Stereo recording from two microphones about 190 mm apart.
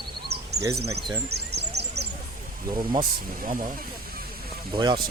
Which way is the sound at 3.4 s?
45° right (ahead or behind).